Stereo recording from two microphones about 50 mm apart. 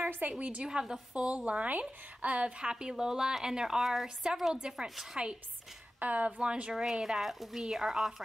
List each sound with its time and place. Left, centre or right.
0.3 s a woman's voice: right
0.7 s a woman's voice: centre
1.1 s a woman's voice: right
2.6 s a woman's voice: centre
5.9 s a woman's voice: right
6.7 s a woman's voice: centre